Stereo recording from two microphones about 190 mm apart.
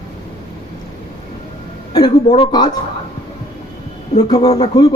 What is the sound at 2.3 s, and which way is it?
Speech, 25° left (ahead or behind).